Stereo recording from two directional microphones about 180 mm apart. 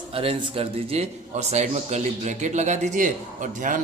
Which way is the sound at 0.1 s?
30° right (ahead or behind).